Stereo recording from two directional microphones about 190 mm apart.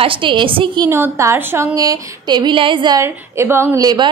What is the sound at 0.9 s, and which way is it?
A woman's voice, 15° right (ahead or behind).